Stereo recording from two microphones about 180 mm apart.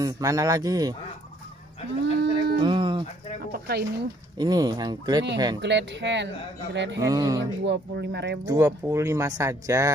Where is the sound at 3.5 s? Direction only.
60° right (ahead or behind).